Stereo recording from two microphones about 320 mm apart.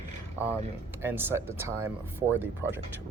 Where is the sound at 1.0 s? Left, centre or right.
Centre.